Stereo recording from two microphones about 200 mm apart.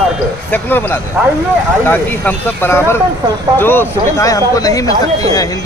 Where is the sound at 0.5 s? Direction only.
10° left (ahead or behind).